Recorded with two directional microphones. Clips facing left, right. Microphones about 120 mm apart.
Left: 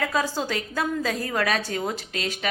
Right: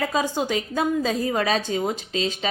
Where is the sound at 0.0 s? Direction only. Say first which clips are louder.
Right 2 dB; 20° right (ahead or behind).